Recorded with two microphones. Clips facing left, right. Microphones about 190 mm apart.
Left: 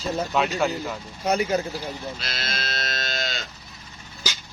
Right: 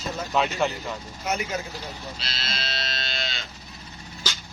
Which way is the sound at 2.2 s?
50° left (ahead or behind).